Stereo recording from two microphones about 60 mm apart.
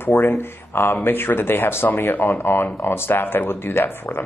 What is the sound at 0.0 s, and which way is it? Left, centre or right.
Speech, left.